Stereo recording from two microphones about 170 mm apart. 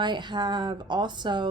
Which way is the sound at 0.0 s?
25° right (ahead or behind).